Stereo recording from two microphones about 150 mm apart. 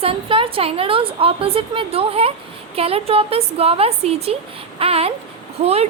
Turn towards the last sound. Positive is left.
turn(degrees=-45)  # may be behind; listen again after turning